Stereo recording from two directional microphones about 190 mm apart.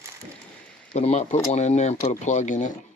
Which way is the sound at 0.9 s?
35° left (ahead or behind).